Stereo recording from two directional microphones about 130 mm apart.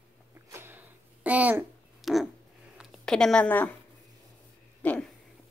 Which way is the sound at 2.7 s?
Centre (ahead or behind).